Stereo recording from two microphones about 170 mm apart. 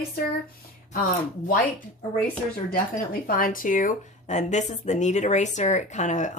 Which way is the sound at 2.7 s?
55° left (ahead or behind).